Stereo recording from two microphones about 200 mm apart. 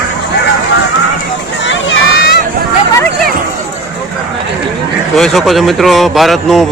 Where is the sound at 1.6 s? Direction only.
65° left (ahead or behind).